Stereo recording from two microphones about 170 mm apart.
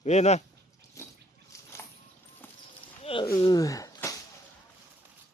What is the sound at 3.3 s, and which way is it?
Speech, 20° left (ahead or behind).